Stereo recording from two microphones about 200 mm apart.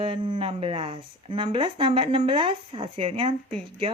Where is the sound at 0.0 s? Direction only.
25° right (ahead or behind).